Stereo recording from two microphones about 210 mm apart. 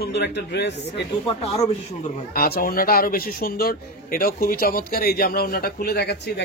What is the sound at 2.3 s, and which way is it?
Speech, 45° left (ahead or behind).